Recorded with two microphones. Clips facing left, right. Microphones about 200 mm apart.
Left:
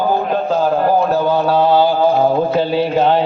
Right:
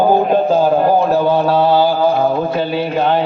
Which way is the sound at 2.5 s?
30° left (ahead or behind).